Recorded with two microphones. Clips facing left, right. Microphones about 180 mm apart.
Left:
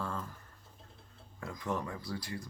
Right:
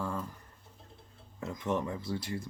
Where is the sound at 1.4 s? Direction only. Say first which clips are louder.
Right 4 dB; 20° right (ahead or behind).